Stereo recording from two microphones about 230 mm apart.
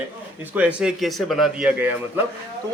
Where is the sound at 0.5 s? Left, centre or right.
Centre.